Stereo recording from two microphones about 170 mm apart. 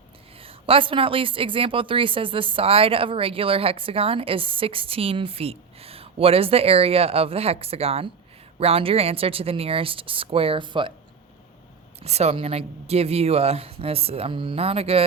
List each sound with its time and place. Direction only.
0.3 s a woman's voice: 35° right (ahead or behind)
12.0 s a woman's voice: 40° right (ahead or behind)